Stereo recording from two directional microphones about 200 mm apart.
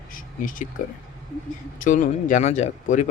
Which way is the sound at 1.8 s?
40° left (ahead or behind).